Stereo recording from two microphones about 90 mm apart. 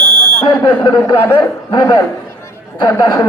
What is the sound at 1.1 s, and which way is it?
Speech, 25° left (ahead or behind).